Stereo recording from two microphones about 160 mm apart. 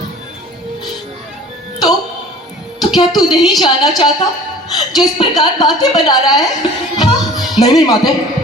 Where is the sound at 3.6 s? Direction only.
25° left (ahead or behind).